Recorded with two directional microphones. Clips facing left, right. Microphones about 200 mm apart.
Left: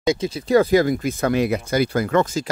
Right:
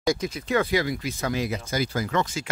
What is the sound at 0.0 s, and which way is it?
Speech, 25° left (ahead or behind).